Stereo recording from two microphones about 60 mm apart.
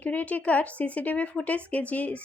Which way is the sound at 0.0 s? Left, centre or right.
Left.